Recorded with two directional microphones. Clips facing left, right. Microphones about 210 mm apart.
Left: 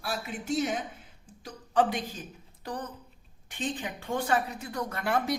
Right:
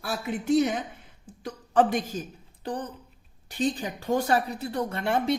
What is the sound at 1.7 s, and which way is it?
Speech, 50° right (ahead or behind).